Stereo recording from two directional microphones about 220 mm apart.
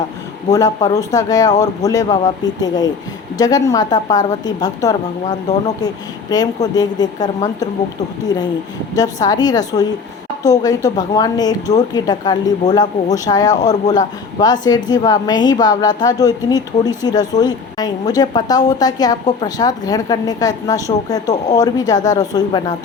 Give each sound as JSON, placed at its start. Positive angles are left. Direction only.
{"t": 0.9, "sound": "speech", "side_deg": 15}
{"t": 6.3, "sound": "speech", "side_deg": 15}
{"t": 9.2, "sound": "speech", "side_deg": 15}